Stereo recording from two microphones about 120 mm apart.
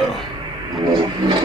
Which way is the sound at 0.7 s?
35° right (ahead or behind).